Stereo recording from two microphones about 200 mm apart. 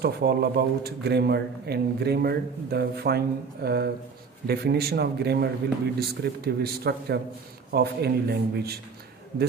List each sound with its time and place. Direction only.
0.0 s a man's voice: 55° right (ahead or behind)